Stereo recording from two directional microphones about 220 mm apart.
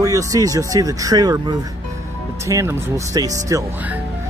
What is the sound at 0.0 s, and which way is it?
Speech, 15° right (ahead or behind).